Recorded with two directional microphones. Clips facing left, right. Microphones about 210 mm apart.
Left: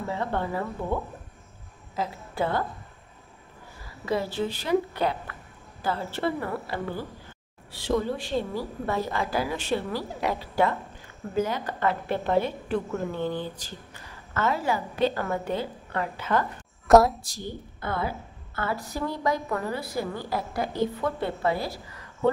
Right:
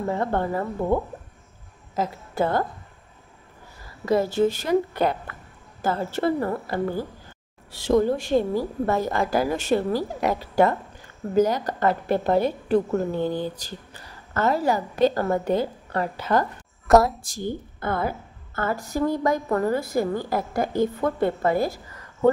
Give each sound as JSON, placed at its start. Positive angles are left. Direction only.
{"t": 0.0, "sound": "a woman's voice", "side_deg": -45}
{"t": 2.0, "sound": "a woman's voice", "side_deg": -45}
{"t": 4.0, "sound": "a woman's voice", "side_deg": -45}
{"t": 16.8, "sound": "a sound", "side_deg": 0}
{"t": 17.2, "sound": "a woman's voice", "side_deg": -50}